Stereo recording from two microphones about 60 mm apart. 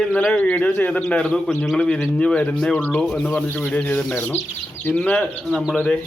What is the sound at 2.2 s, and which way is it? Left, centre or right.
Speech, centre.